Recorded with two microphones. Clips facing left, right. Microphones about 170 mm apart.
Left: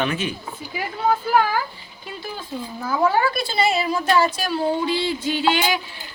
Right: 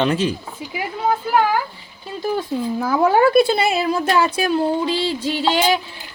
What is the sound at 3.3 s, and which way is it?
A woman's voice, 55° right (ahead or behind).